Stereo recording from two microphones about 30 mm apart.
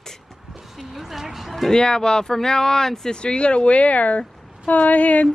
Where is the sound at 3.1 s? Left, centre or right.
Left.